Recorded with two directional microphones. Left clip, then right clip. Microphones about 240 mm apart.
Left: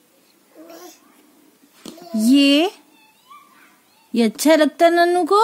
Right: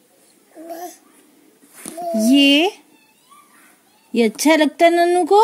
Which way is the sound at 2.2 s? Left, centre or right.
Left.